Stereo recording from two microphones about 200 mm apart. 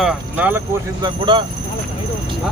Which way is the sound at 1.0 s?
25° right (ahead or behind).